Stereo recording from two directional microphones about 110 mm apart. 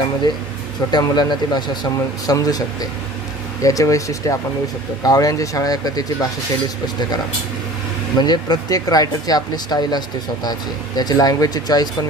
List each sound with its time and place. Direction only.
0.9 s speech: 40° left (ahead or behind)
8.2 s speech: 40° left (ahead or behind)